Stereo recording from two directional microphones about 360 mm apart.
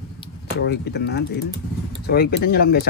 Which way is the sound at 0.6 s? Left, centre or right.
Left.